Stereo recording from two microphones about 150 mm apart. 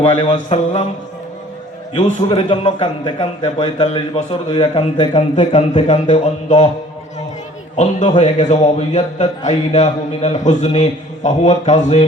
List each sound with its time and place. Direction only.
0.0 s a man's voice: 35° left (ahead or behind)
0.3 s a man's voice: 50° left (ahead or behind)
2.3 s a man's voice: 35° left (ahead or behind); by 6.7 s 50° left (ahead or behind)
7.8 s a man's voice: 50° left (ahead or behind)